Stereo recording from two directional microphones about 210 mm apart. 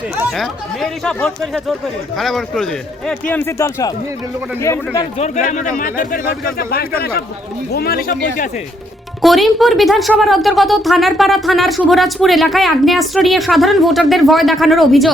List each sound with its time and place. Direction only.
0.3 s a woman's voice: centre (ahead or behind)
5.1 s speech: 35° left (ahead or behind)
9.2 s a woman's voice: centre (ahead or behind)